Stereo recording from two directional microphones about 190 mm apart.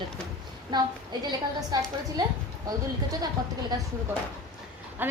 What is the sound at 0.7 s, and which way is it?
Speech, 25° right (ahead or behind).